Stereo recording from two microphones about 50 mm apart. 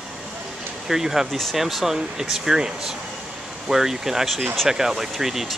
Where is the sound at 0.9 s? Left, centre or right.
Centre.